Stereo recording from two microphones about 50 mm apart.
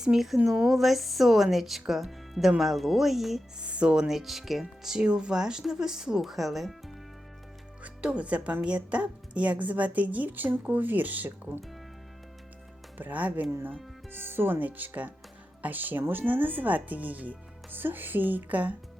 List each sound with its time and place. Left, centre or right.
0.2 s a woman's voice: centre
3.6 s speech: right
4.1 s a woman's voice: centre
7.9 s speech: right
13.0 s speech: right
14.1 s speech: right